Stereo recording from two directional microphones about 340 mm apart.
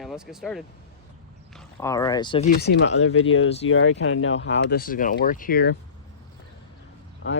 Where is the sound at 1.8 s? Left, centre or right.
Centre; by 5.8 s left.